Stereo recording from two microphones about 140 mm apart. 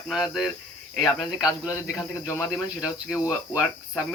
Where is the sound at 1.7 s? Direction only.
20° left (ahead or behind).